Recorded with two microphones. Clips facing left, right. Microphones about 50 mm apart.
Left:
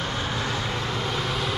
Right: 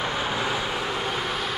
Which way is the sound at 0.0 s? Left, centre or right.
Centre.